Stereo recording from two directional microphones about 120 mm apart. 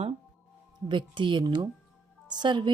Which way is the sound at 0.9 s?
40° right (ahead or behind).